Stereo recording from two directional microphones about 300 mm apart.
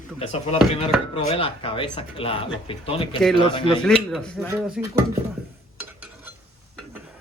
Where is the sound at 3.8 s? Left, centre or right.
Centre.